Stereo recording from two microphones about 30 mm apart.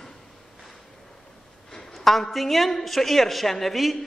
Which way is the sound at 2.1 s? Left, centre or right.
Centre.